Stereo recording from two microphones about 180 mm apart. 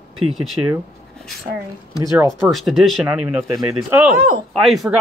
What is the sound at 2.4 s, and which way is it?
Speech, centre (ahead or behind).